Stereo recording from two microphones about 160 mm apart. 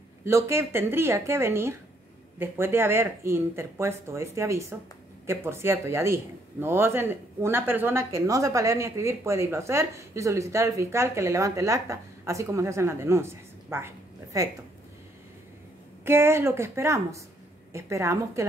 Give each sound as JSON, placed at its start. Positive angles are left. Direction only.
{"t": 0.2, "sound": "speech", "side_deg": -15}
{"t": 16.1, "sound": "a woman's voice", "side_deg": -15}